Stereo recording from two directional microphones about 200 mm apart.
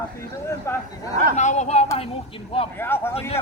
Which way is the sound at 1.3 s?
35° left (ahead or behind).